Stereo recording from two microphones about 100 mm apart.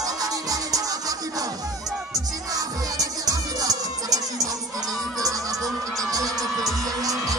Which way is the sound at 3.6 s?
35° right (ahead or behind).